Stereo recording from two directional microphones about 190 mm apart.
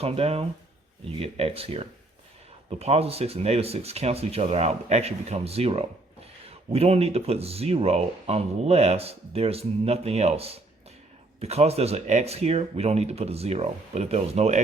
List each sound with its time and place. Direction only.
0.0 s speech: 30° right (ahead or behind)